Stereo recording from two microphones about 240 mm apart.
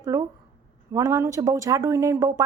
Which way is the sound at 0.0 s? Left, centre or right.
Centre.